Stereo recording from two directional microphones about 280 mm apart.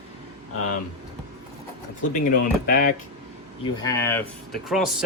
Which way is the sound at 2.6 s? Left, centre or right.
Left.